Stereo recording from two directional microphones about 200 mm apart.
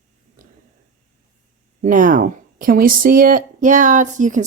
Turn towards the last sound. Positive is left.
turn(degrees=-40)  # may be behind; listen again after turning